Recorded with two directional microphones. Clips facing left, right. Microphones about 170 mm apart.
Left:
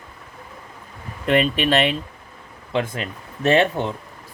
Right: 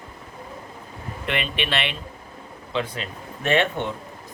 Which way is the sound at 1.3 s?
40° left (ahead or behind).